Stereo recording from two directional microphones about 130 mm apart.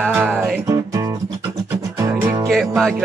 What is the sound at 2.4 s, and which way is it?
Music, centre (ahead or behind).